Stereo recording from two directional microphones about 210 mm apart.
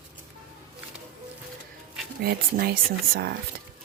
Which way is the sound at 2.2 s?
45° right (ahead or behind).